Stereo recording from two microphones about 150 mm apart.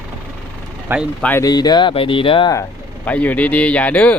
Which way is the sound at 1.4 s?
25° left (ahead or behind).